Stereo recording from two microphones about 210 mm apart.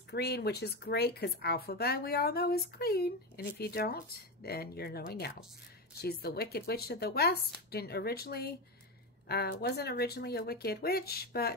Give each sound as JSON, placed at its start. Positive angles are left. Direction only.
{"t": 0.1, "sound": "speech", "side_deg": 50}